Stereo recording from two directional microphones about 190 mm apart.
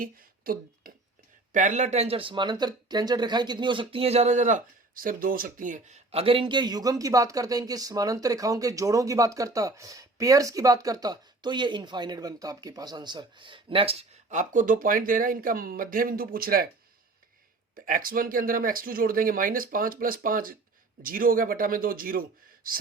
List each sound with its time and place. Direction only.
0.0 s speech: 50° right (ahead or behind)
1.5 s speech: 40° right (ahead or behind)
17.7 s speech: 45° right (ahead or behind)